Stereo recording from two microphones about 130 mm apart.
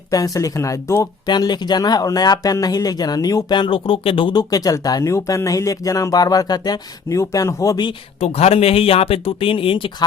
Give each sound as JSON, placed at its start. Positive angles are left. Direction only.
{"t": 0.1, "sound": "speech", "side_deg": 25}
{"t": 1.3, "sound": "speech", "side_deg": 35}
{"t": 7.8, "sound": "speech", "side_deg": 40}
{"t": 8.4, "sound": "speech", "side_deg": 50}